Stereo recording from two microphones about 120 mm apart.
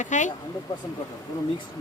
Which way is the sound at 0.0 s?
90° left.